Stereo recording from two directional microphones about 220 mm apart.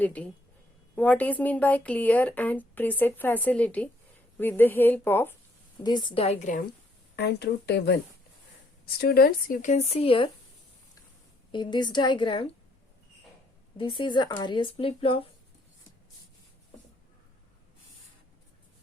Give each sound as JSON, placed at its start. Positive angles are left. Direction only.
{"t": 0.0, "sound": "speech", "side_deg": 5}
{"t": 5.7, "sound": "speech", "side_deg": 20}
{"t": 7.2, "sound": "speech", "side_deg": 50}
{"t": 11.5, "sound": "speech", "side_deg": 20}
{"t": 13.7, "sound": "speech", "side_deg": 25}